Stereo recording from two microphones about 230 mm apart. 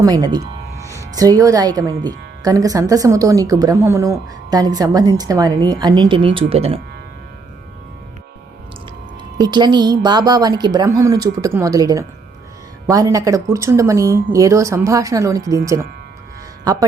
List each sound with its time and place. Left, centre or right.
0.0 s speech: centre
9.4 s speech: centre